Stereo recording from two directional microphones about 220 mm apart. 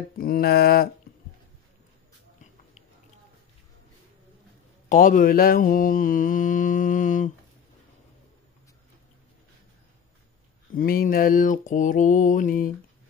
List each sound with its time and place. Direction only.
0.2 s mantra: 45° left (ahead or behind)
4.8 s mantra: 40° left (ahead or behind)
10.7 s mantra: 40° left (ahead or behind)